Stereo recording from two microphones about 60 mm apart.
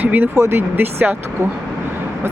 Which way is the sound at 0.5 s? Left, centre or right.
Right.